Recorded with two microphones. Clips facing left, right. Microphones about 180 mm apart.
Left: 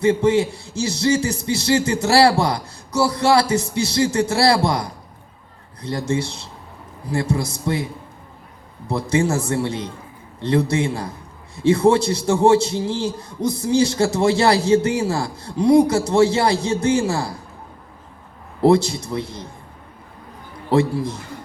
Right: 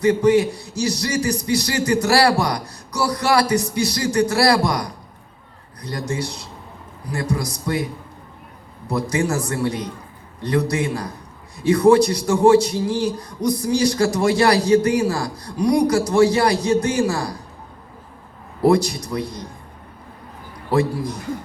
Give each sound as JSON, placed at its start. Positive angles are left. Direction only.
{"t": 0.0, "sound": "a man's voice", "side_deg": 25}
{"t": 8.9, "sound": "a man's voice", "side_deg": 25}
{"t": 18.6, "sound": "a man's voice", "side_deg": 25}
{"t": 20.7, "sound": "a man's voice", "side_deg": 25}